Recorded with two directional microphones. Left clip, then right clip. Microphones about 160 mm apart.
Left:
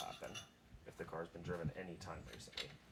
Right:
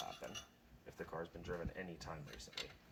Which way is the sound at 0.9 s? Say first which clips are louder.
Even; 30° right (ahead or behind).